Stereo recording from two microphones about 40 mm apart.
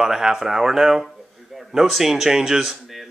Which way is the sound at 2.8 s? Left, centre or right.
Centre.